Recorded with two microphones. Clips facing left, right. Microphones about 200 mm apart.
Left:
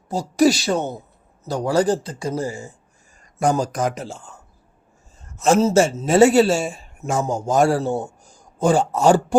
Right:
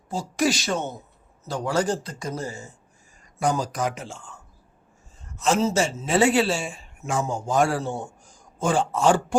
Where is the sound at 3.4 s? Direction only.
45° left (ahead or behind).